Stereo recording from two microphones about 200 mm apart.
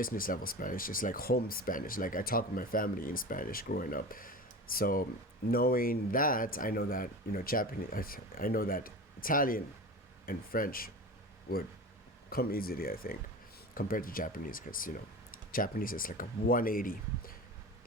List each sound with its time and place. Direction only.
0.0 s speech: 45° left (ahead or behind)
12.3 s speech: 45° left (ahead or behind)